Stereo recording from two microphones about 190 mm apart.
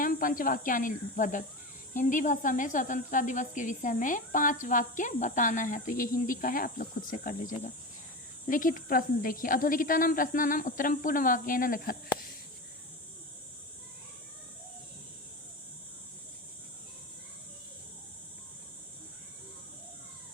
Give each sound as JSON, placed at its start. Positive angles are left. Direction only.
{"t": 0.0, "sound": "speech", "side_deg": 45}